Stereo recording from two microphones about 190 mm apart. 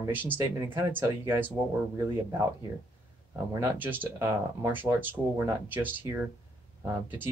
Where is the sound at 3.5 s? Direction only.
15° right (ahead or behind).